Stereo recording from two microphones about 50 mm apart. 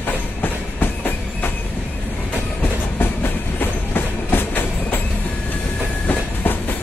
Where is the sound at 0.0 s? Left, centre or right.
Left.